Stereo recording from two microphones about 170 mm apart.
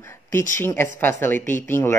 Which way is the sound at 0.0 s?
15° left (ahead or behind).